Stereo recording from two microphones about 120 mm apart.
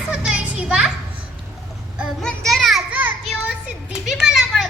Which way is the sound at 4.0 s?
5° right (ahead or behind).